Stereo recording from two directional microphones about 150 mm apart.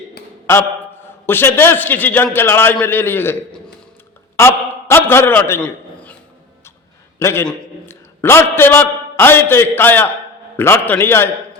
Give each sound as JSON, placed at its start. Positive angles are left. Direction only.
{"t": 1.3, "sound": "a man's voice", "side_deg": 15}
{"t": 7.2, "sound": "a man's voice", "side_deg": 20}